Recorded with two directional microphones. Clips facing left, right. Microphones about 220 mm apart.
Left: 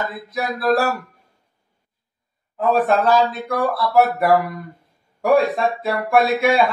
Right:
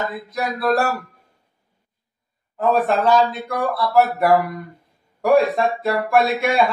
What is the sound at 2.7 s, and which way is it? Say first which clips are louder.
Speech: left 1 dB; centre (ahead or behind).